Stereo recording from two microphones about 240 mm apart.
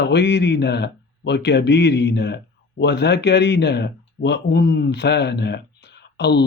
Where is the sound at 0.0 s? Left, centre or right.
Left.